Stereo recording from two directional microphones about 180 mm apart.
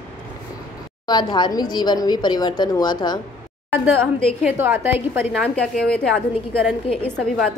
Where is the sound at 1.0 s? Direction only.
25° left (ahead or behind).